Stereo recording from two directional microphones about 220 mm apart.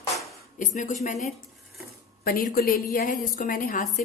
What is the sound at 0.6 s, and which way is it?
A woman's voice, 35° left (ahead or behind).